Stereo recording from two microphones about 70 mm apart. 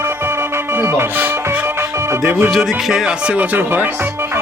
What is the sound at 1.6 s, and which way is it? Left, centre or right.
Music, right.